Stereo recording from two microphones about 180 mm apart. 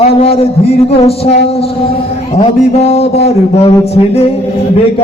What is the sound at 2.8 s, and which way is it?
A woman's voice, 35° left (ahead or behind).